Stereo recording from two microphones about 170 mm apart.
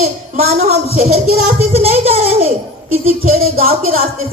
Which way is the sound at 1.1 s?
60° right (ahead or behind).